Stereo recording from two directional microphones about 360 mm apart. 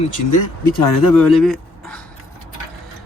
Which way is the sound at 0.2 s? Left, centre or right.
Left.